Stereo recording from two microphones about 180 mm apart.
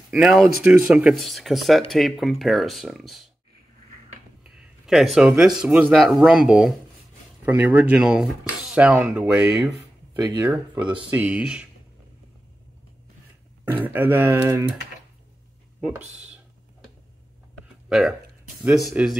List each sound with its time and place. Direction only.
0.1 s speech: centre (ahead or behind)
4.4 s speech: 5° right (ahead or behind)
10.1 s speech: 20° right (ahead or behind)
10.4 s speech: 10° right (ahead or behind)
13.7 s speech: 10° right (ahead or behind)
15.8 s speech: 5° right (ahead or behind)
17.8 s speech: centre (ahead or behind)